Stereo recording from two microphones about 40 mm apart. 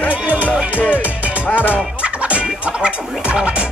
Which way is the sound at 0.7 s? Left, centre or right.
Left.